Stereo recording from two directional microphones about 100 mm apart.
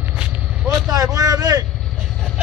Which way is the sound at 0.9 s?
35° right (ahead or behind).